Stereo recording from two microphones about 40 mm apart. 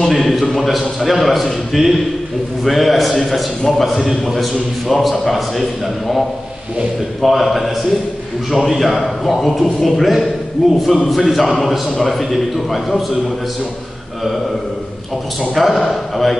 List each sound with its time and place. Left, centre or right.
0.0 s a man's voice: centre
7.2 s a man's voice: centre
10.6 s a man's voice: centre
15.5 s a man's voice: centre